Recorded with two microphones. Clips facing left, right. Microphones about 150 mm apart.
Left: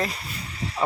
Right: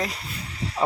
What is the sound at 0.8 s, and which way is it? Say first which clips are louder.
Speech: right 1 dB; 15° right (ahead or behind).